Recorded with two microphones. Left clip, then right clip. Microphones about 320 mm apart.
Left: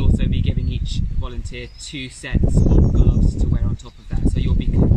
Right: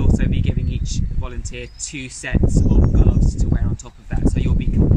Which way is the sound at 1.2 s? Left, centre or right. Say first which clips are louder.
Right 1 dB; centre.